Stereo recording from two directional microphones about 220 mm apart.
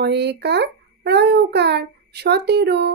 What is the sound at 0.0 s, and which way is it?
A child's voice, 50° right (ahead or behind).